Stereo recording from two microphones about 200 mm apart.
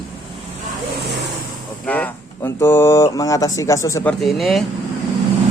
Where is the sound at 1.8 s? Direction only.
5° left (ahead or behind).